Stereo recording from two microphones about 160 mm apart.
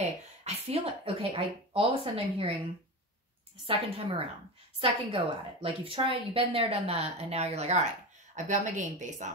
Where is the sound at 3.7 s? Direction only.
35° right (ahead or behind).